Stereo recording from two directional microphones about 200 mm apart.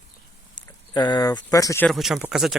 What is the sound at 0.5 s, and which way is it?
Speech, 20° left (ahead or behind).